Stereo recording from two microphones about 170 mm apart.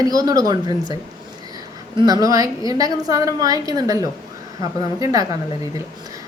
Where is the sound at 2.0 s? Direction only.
20° right (ahead or behind).